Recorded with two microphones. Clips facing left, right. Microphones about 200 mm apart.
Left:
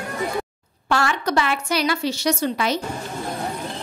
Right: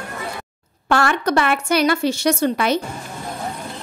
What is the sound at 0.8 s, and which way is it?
A woman's voice, 55° right (ahead or behind).